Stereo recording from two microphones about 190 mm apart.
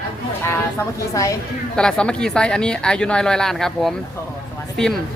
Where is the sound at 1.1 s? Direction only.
15° left (ahead or behind).